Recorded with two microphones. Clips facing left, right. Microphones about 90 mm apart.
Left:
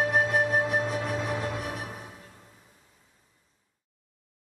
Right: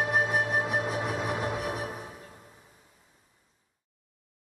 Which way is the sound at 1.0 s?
15° right (ahead or behind).